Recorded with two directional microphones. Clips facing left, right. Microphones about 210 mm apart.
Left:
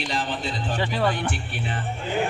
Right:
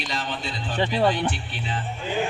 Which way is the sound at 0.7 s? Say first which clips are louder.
Right 4 dB; 20° right (ahead or behind).